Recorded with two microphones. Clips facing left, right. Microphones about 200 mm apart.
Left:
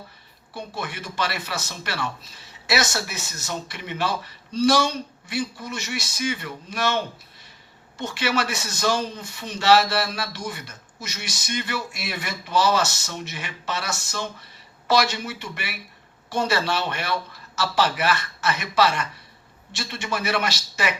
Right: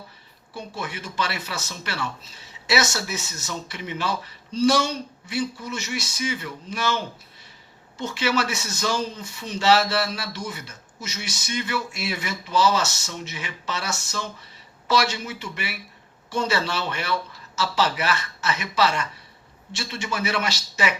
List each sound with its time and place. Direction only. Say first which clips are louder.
0.5 s a man's voice: even; 55° left (ahead or behind)
5.3 s a man's voice: right 1 dB; 55° left (ahead or behind)